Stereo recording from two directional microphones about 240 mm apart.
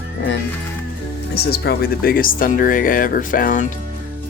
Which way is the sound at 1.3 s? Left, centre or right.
Left.